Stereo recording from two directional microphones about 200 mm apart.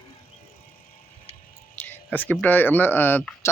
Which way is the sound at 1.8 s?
10° left (ahead or behind).